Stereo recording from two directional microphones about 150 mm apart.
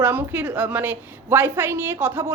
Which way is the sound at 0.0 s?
15° right (ahead or behind).